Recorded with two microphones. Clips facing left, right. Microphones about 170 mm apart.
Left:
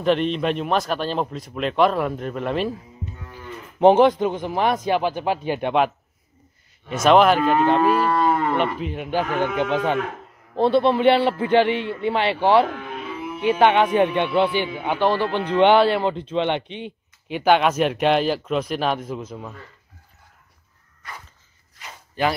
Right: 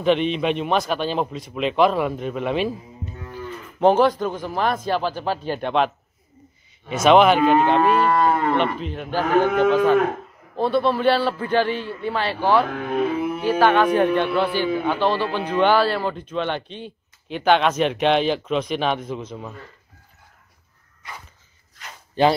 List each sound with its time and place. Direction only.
0.0 s moo: centre (ahead or behind)
3.8 s speech: 20° left (ahead or behind)
6.9 s moo: centre (ahead or behind); by 9.9 s 20° left (ahead or behind)
10.5 s a man's voice: 25° left (ahead or behind)
12.7 s speech: 55° right (ahead or behind)
13.5 s a man's voice: 20° left (ahead or behind); by 19.5 s 5° left (ahead or behind)